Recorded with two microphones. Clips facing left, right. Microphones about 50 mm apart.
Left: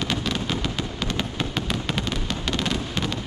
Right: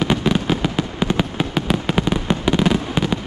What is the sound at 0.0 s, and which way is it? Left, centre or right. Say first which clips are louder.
Fireworks: right 8 dB; centre.